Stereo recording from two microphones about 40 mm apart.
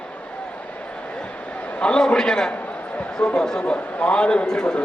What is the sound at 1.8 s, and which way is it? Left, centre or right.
A man's voice, left.